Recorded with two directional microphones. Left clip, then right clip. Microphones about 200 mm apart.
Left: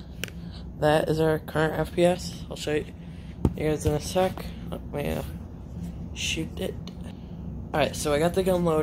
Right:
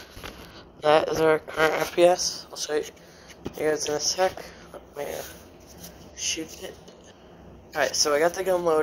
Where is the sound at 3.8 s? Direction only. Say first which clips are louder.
Right 1 dB; centre (ahead or behind).